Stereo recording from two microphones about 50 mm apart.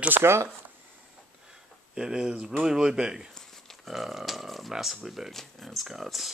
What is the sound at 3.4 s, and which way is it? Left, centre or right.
Speech, centre.